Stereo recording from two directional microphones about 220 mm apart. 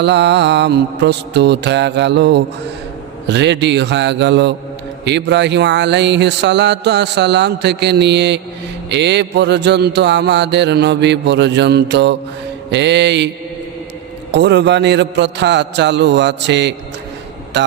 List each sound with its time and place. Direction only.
0.0 s speech: 50° right (ahead or behind)
14.3 s speech: 50° right (ahead or behind)